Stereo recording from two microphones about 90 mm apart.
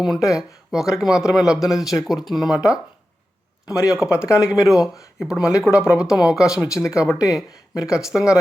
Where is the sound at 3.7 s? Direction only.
35° left (ahead or behind).